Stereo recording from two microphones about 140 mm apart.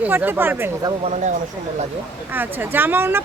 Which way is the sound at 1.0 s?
55° right (ahead or behind).